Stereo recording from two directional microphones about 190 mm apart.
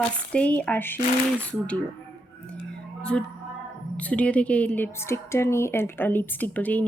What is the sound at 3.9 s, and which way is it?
A woman's voice, 5° left (ahead or behind).